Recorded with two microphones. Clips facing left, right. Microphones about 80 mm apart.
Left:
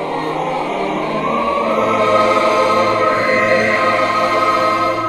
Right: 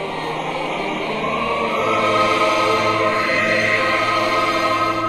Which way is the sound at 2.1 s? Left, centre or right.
Left.